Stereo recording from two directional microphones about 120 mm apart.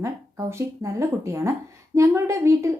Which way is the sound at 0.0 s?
25° right (ahead or behind).